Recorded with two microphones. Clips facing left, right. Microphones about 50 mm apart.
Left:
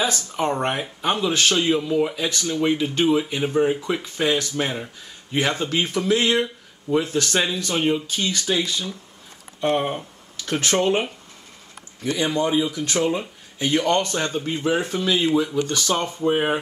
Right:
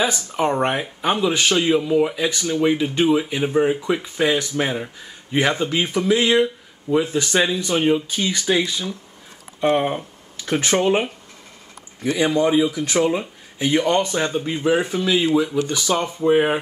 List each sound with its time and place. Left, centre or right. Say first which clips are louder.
0.0 s speech: right 3 dB; centre